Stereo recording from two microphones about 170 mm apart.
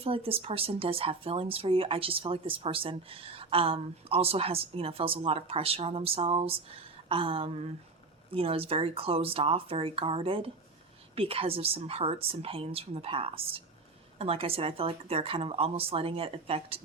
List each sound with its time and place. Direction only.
0.0 s speech: 35° right (ahead or behind)